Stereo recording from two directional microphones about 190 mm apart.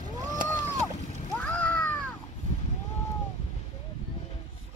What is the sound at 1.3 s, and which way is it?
Cat, 10° left (ahead or behind).